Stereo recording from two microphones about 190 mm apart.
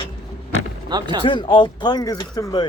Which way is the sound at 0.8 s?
25° right (ahead or behind).